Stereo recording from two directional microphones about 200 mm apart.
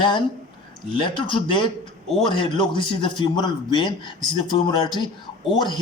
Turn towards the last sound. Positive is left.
turn(degrees=25)  # may be behind; listen again after turning